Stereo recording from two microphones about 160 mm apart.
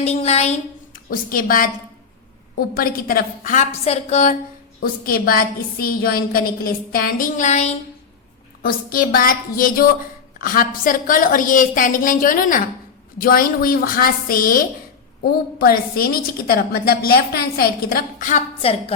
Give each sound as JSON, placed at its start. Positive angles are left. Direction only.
{"t": 0.0, "sound": "a woman's voice", "side_deg": 40}
{"t": 0.9, "sound": "a woman's voice", "side_deg": 60}
{"t": 4.8, "sound": "a woman's voice", "side_deg": 65}
{"t": 8.6, "sound": "a woman's voice", "side_deg": 65}
{"t": 15.2, "sound": "a woman's voice", "side_deg": 75}
{"t": 18.6, "sound": "a woman's voice", "side_deg": 35}